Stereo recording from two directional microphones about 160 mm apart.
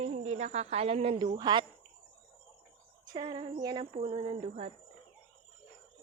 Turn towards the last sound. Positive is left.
turn(degrees=-40)  # may be behind; listen again after turning